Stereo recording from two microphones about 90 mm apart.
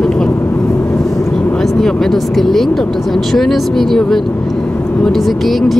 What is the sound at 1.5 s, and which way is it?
Speech, 5° left (ahead or behind).